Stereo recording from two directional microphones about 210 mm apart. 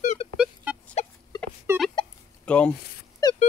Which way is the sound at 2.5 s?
5° left (ahead or behind).